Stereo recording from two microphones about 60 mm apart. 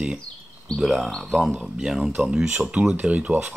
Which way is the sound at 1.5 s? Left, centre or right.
Centre.